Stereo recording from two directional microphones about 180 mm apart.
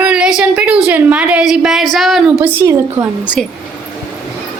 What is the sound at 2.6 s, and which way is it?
Speech, 15° right (ahead or behind).